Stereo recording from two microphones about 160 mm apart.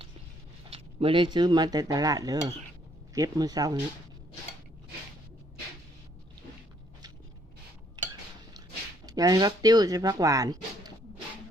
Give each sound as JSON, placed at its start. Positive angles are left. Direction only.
{"t": 0.7, "sound": "cutlery", "side_deg": -35}
{"t": 8.0, "sound": "a sound", "side_deg": -25}
{"t": 9.0, "sound": "speech", "side_deg": -25}